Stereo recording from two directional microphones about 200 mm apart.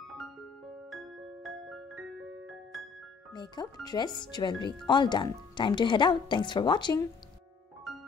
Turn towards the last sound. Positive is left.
turn(degrees=20)  # may be behind; listen again after turning